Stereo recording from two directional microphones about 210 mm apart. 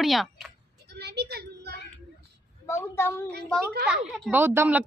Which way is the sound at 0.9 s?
50° right (ahead or behind).